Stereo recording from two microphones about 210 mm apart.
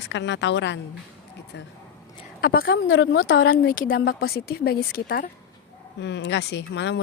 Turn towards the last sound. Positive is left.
turn(degrees=55)  # may be behind; listen again after turning